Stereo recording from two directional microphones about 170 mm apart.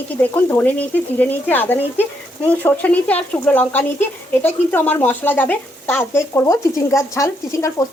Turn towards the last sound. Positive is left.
turn(degrees=20)  # may be behind; listen again after turning